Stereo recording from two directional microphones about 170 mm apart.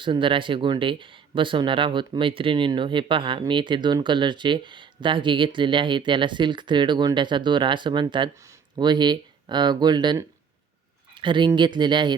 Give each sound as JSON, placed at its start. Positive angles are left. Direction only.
{"t": 0.0, "sound": "speech", "side_deg": -30}